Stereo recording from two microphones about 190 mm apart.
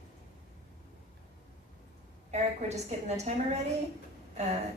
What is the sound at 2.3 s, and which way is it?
A man's voice, 35° right (ahead or behind).